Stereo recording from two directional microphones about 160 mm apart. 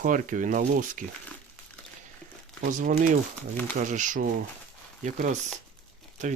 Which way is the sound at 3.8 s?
50° right (ahead or behind).